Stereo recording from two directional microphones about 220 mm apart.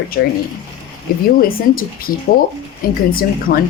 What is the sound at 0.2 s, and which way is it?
Speech, 40° left (ahead or behind).